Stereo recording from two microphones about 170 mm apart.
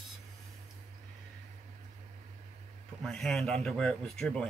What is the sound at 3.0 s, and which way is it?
A man's voice, centre (ahead or behind).